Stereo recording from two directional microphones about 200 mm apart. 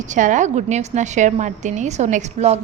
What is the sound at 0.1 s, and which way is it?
A woman's voice, 40° right (ahead or behind).